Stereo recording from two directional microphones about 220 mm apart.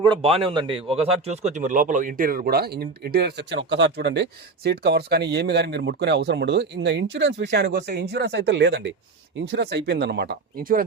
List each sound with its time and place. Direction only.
0.0 s speech: 25° right (ahead or behind); by 10.8 s 40° right (ahead or behind)